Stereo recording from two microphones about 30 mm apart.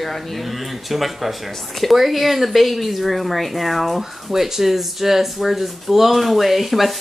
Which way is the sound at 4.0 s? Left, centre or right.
Centre.